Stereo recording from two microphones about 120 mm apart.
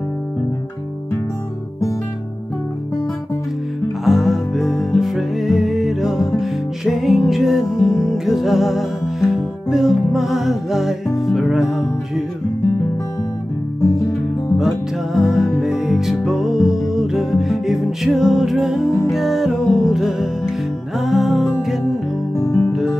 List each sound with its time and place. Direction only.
4.0 s music: centre (ahead or behind)
14.6 s music: centre (ahead or behind)
22.4 s music: 20° left (ahead or behind)
22.7 s music: centre (ahead or behind)